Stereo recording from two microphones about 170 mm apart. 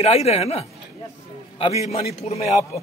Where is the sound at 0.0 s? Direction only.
40° left (ahead or behind).